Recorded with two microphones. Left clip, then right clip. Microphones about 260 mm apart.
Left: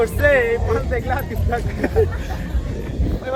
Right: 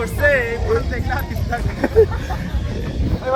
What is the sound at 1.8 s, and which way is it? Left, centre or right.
Speech, centre.